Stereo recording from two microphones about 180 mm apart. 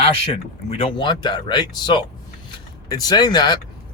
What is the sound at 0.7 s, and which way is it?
Speech, 30° left (ahead or behind).